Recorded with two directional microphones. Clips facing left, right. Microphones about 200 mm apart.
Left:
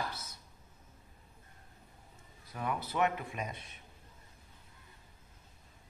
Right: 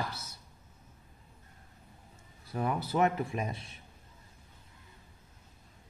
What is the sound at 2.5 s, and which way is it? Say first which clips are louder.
Speech: right 4 dB; 30° right (ahead or behind).